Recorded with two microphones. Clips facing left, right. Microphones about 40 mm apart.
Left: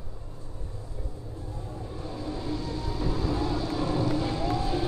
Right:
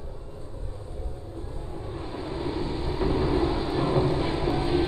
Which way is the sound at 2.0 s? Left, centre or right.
Right.